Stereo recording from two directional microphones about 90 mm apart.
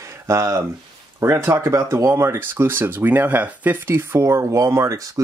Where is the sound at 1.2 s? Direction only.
30° right (ahead or behind).